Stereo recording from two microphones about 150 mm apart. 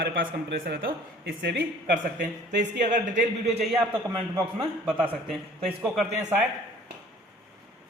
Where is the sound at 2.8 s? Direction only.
55° right (ahead or behind).